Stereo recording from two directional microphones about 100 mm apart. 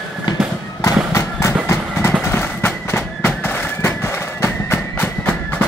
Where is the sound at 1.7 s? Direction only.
25° left (ahead or behind).